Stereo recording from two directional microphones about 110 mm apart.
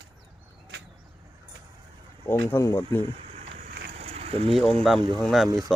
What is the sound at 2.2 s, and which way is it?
Speech, 25° left (ahead or behind).